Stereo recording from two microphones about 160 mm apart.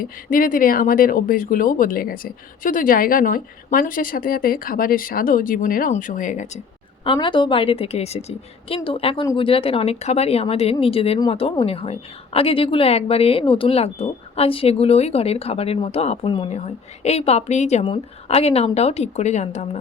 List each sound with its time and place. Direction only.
0.0 s speech: 60° left (ahead or behind)
7.0 s a woman's voice: 30° left (ahead or behind)